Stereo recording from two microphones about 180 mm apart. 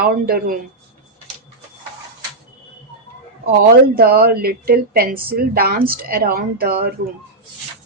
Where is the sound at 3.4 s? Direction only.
60° right (ahead or behind).